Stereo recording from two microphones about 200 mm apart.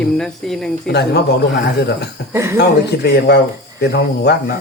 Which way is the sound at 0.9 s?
55° left (ahead or behind).